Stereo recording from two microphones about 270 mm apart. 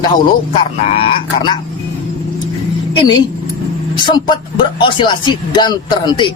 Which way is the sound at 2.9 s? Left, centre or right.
Centre.